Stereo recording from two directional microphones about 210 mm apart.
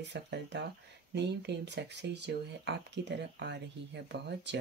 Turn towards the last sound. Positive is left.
turn(degrees=-55)  # may be behind; listen again after turning